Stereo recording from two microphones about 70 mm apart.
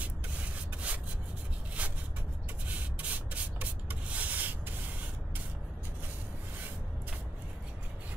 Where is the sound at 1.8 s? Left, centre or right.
Centre.